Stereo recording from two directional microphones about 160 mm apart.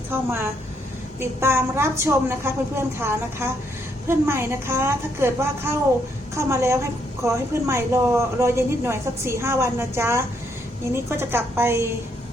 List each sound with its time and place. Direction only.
0.1 s a woman's voice: 15° right (ahead or behind)